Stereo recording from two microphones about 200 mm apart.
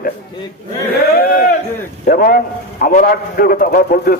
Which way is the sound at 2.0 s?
45° left (ahead or behind).